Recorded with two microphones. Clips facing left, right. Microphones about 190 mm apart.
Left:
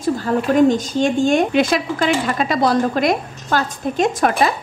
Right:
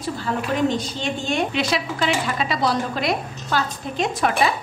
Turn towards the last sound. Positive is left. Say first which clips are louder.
# left 4 dB
turn(degrees=45)  # may be behind; listen again after turning